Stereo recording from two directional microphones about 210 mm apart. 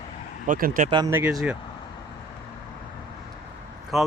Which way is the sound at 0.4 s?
40° right (ahead or behind).